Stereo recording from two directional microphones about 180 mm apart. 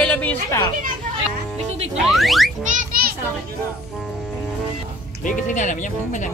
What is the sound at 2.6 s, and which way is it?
Children playing, 55° right (ahead or behind).